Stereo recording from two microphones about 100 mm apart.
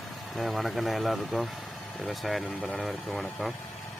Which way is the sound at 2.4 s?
15° left (ahead or behind).